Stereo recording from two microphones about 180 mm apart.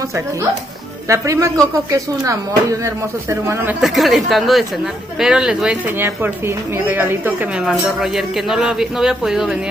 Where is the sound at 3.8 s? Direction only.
Centre (ahead or behind).